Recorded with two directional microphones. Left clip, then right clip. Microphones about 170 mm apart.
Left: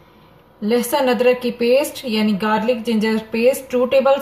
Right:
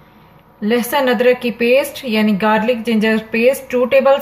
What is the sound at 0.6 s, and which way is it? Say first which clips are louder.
A woman's voice: right 2 dB; centre (ahead or behind).